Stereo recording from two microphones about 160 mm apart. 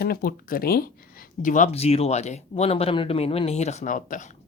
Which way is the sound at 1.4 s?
55° left (ahead or behind).